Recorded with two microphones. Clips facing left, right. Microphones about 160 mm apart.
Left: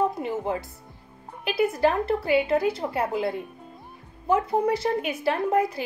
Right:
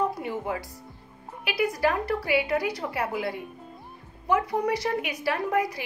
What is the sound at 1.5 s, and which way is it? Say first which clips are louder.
A woman's voice: left 3 dB; 25° left (ahead or behind).